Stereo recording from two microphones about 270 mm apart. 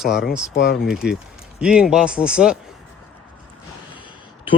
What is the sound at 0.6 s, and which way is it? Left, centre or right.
Speech, left.